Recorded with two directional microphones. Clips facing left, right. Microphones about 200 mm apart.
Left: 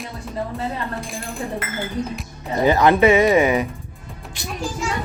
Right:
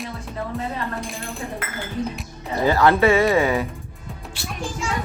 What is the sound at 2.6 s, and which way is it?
Speech, 20° left (ahead or behind).